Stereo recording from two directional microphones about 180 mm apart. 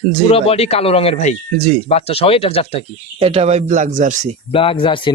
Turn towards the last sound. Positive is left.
turn(degrees=30)  # may be behind; listen again after turning